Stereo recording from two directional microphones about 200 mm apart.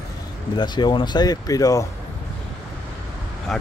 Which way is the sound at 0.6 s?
20° left (ahead or behind).